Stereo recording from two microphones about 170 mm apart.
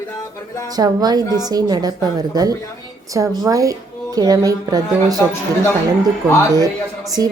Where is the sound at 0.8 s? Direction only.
25° right (ahead or behind).